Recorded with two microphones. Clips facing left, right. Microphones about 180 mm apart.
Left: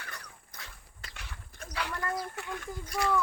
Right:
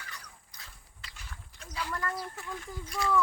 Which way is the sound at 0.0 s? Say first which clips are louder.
Left 2 dB; 60° left (ahead or behind).